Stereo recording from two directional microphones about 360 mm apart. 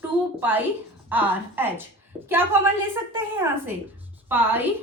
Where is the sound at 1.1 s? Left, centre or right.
Centre.